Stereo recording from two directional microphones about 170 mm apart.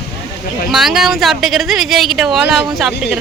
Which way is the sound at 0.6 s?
Centre (ahead or behind).